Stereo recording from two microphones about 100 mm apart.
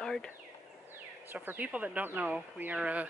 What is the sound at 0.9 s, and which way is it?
Speech, 20° right (ahead or behind).